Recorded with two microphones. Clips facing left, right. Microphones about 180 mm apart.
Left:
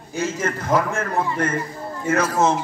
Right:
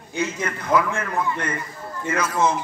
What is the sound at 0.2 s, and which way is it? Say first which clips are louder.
A man's voice: left 2 dB; 50° left (ahead or behind).